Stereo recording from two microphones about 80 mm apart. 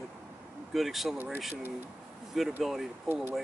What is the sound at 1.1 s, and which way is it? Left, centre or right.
Speech, right.